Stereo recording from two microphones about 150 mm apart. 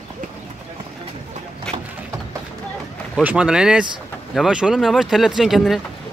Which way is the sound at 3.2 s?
5° right (ahead or behind).